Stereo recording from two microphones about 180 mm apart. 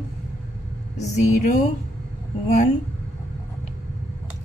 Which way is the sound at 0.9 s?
40° left (ahead or behind).